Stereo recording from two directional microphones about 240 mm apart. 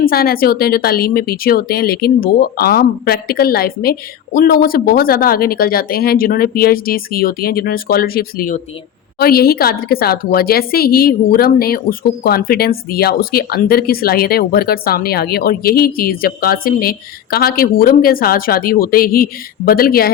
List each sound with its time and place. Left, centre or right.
0.0 s a woman's voice: left